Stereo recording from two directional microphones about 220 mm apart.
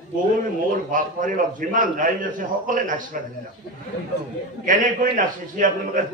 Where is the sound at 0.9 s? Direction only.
35° right (ahead or behind).